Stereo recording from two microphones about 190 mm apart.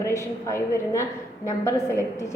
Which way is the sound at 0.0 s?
15° left (ahead or behind).